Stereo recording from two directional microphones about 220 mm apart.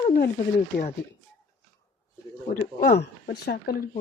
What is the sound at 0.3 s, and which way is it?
Speech, 30° left (ahead or behind).